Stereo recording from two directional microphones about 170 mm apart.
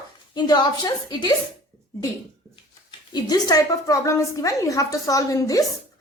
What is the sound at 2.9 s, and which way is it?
Speech, 25° left (ahead or behind).